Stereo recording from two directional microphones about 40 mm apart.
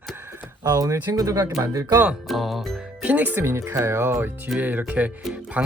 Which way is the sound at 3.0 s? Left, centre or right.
Right.